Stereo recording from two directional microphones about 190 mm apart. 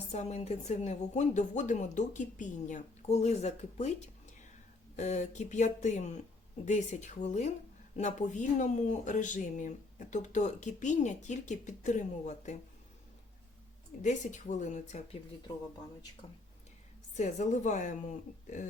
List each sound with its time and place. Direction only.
0.1 s speech: 35° left (ahead or behind)
14.0 s speech: 40° left (ahead or behind)
17.2 s speech: 40° left (ahead or behind)